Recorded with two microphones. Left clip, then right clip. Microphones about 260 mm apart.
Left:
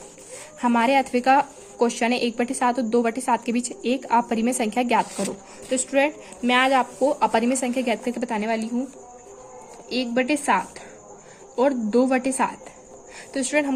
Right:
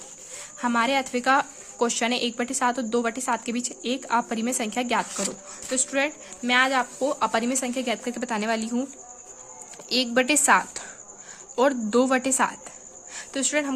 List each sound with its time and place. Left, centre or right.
0.6 s speech: centre
9.9 s a woman's voice: right